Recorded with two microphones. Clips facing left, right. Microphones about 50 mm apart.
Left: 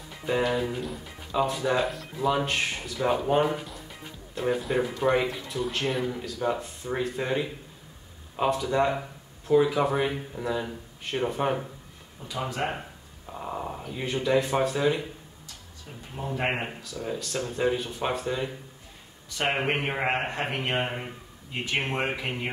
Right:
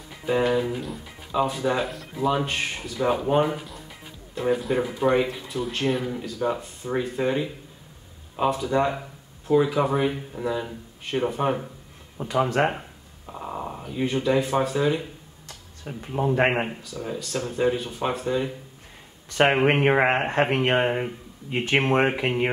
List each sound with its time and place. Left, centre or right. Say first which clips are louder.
0.5 s speech: right 4 dB; centre
12.2 s speech: right 9 dB; right
13.3 s speech: right 1 dB; centre
15.4 s a sound: right 11 dB; right
16.6 s speech: right 2 dB; centre
19.6 s a man's voice: right 8 dB; right
21.6 s a man's voice: right 7 dB; right